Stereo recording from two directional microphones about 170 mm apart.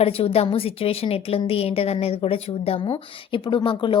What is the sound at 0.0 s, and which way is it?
A woman's voice, 35° left (ahead or behind).